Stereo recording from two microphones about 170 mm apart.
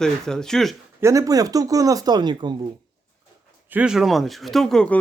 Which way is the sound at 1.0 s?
20° right (ahead or behind).